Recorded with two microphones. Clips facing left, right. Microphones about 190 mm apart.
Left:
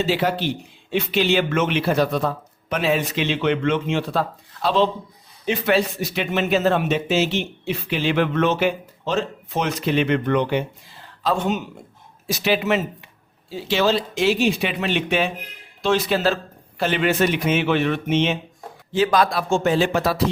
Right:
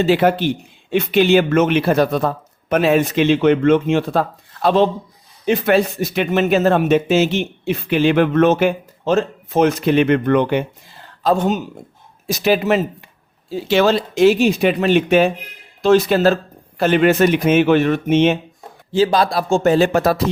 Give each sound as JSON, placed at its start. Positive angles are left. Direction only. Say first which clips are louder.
{"t": 0.0, "sound": "speech", "louder": "right 6 dB", "side_deg": -55}
{"t": 11.2, "sound": "speech", "louder": "right 5 dB", "side_deg": -40}
{"t": 13.5, "sound": "speech", "louder": "right 5 dB", "side_deg": -50}
{"t": 18.9, "sound": "speech", "louder": "right 3 dB", "side_deg": -30}